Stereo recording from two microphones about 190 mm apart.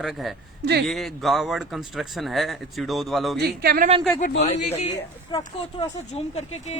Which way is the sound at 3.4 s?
50° right (ahead or behind).